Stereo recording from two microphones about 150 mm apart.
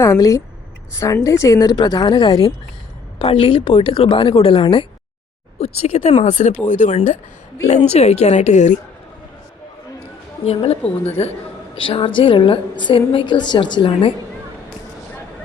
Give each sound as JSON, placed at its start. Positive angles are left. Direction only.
{"t": 0.0, "sound": "a woman's voice", "side_deg": 20}
{"t": 3.2, "sound": "a woman's voice", "side_deg": 40}
{"t": 10.4, "sound": "a woman's voice", "side_deg": 40}